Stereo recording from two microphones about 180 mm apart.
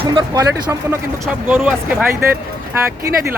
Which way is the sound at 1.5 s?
10° right (ahead or behind).